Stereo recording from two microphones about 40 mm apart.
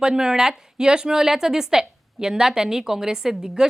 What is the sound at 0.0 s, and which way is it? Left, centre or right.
A woman's voice, centre.